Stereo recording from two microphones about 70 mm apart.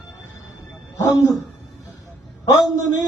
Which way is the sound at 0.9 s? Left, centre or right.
Left.